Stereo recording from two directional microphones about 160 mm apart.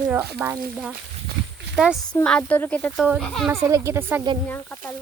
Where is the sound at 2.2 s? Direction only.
10° left (ahead or behind).